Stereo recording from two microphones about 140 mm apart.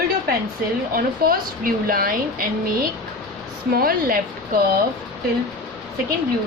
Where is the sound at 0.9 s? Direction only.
90° right.